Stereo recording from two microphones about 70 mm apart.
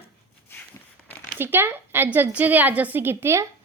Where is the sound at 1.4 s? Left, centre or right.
Right.